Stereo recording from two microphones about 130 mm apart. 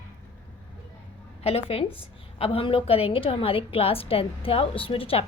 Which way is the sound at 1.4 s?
50° left (ahead or behind).